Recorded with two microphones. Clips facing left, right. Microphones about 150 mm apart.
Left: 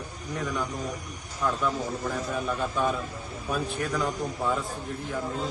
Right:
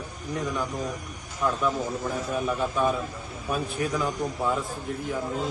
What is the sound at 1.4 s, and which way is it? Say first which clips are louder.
A man's voice: right 2 dB; centre (ahead or behind).